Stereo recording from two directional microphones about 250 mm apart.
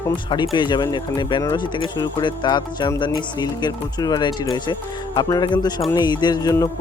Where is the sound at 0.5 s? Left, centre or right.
Centre.